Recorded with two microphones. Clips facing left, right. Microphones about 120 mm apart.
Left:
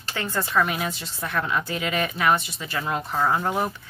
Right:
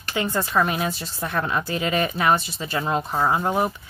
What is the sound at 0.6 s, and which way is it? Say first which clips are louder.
Speech: right 3 dB; 35° right (ahead or behind).